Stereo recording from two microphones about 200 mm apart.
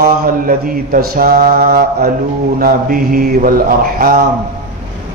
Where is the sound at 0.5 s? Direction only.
45° right (ahead or behind).